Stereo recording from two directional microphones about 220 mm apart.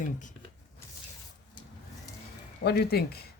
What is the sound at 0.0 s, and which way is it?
Speech, 35° left (ahead or behind).